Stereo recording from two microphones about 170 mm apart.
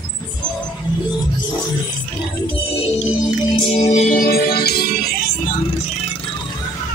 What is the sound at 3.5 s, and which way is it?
Music, 30° left (ahead or behind).